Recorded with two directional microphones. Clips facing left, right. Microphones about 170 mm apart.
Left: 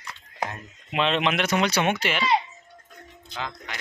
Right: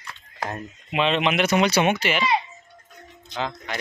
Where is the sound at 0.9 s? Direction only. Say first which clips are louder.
Right 2 dB; 5° right (ahead or behind).